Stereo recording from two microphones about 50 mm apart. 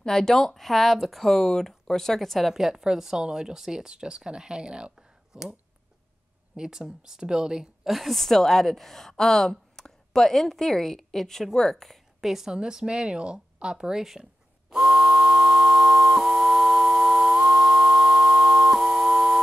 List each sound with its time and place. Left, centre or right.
0.0 s a woman's voice: centre
2.5 s speech: centre
7.9 s a woman's voice: centre
12.5 s speech: centre
14.7 s a sound: centre